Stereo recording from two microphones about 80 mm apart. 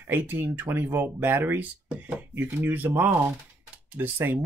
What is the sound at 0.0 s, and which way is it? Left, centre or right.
Speech, right.